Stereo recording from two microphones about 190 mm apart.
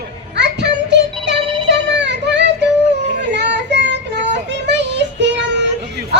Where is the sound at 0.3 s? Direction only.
65° right (ahead or behind).